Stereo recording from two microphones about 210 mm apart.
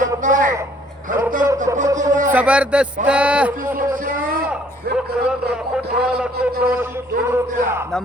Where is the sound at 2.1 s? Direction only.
35° right (ahead or behind).